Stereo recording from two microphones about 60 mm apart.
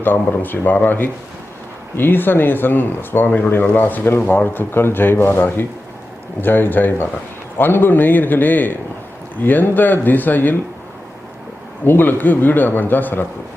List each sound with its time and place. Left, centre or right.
0.0 s speech: left
11.9 s speech: left